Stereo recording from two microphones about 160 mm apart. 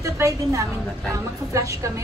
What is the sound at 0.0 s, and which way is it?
A woman's voice, 20° right (ahead or behind).